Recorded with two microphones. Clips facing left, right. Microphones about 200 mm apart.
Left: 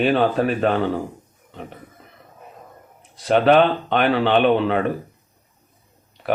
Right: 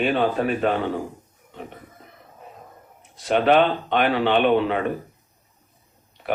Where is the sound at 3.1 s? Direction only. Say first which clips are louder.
Left 3 dB; 35° left (ahead or behind).